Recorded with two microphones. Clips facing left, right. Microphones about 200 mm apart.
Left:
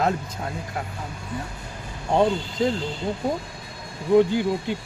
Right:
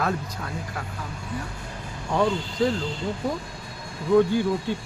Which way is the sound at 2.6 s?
20° left (ahead or behind).